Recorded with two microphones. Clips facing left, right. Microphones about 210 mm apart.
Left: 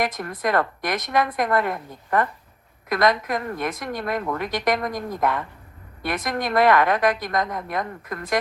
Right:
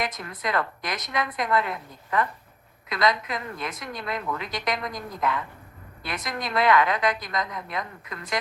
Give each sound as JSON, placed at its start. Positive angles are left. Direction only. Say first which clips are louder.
{"t": 0.0, "sound": "a woman's voice", "louder": "left 6 dB", "side_deg": 50}